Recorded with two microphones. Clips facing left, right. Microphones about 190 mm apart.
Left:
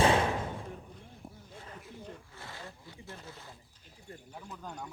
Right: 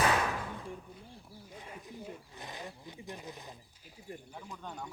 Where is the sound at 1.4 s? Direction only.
10° right (ahead or behind).